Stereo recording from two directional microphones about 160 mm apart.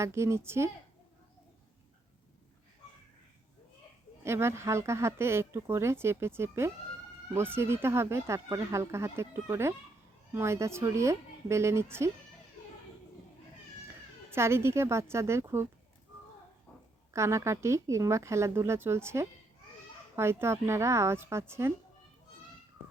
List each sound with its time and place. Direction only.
0.0 s speech: 15° right (ahead or behind)
4.2 s speech: 15° right (ahead or behind)
14.3 s speech: 15° right (ahead or behind)
17.2 s speech: 15° right (ahead or behind)